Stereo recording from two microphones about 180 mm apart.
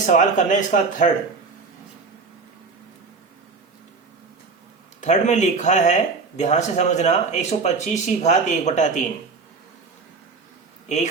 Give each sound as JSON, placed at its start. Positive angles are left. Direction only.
{"t": 0.0, "sound": "speech", "side_deg": 45}
{"t": 4.9, "sound": "speech", "side_deg": 40}
{"t": 10.8, "sound": "speech", "side_deg": 40}